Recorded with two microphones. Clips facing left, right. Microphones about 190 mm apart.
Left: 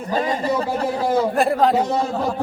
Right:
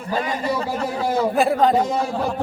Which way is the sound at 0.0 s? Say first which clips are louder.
Left 2 dB; 30° left (ahead or behind).